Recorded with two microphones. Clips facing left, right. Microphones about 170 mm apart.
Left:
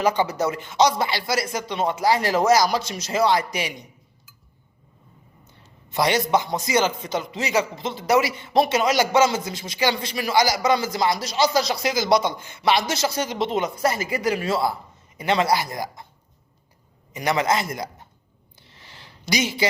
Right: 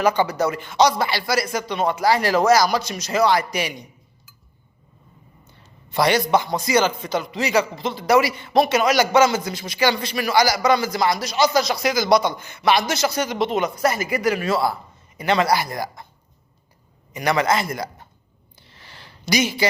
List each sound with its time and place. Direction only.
0.1 s a man's voice: 25° left (ahead or behind)
6.3 s a man's voice: 20° left (ahead or behind)
17.1 s a man's voice: 20° left (ahead or behind)
18.7 s a sound: 60° right (ahead or behind)
19.3 s a man's voice: 25° left (ahead or behind)